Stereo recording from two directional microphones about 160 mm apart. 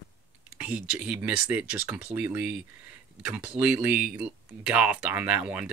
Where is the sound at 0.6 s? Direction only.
5° right (ahead or behind).